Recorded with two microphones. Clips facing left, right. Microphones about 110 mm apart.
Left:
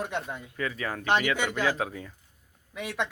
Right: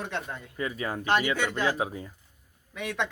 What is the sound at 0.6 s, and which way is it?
Speech, 20° right (ahead or behind).